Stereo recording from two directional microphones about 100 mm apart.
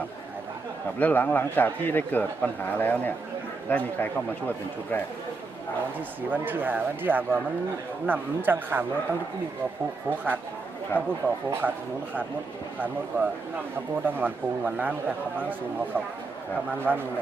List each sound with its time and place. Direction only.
0.9 s a man's voice: 20° left (ahead or behind)
6.3 s speech: 20° right (ahead or behind)
10.1 s speech: 20° right (ahead or behind)
10.9 s speech: 15° left (ahead or behind)
11.6 s speech: 15° right (ahead or behind)
13.1 s speech: 20° right (ahead or behind)
16.9 s speech: 15° left (ahead or behind)